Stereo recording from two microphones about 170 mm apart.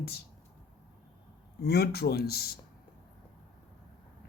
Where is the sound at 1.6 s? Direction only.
65° left (ahead or behind).